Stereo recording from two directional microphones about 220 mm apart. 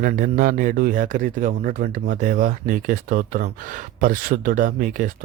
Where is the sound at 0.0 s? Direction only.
35° right (ahead or behind).